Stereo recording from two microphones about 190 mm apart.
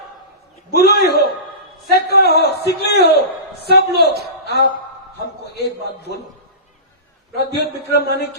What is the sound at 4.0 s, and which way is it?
Speech, 60° right (ahead or behind).